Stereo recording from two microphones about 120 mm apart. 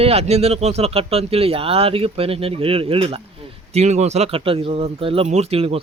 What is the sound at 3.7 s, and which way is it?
A man's voice, 65° right (ahead or behind).